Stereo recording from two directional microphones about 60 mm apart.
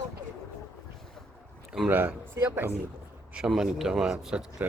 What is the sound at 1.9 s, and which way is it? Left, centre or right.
Speech, right.